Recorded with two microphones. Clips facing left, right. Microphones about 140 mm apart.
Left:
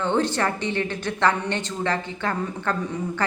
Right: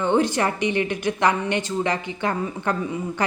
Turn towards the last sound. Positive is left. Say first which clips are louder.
# right 1 dB
turn(degrees=-15)  # may be behind; listen again after turning